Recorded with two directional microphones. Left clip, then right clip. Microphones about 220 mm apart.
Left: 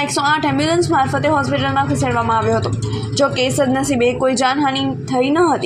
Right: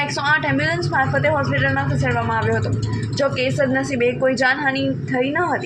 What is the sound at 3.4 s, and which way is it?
Speech, 50° left (ahead or behind).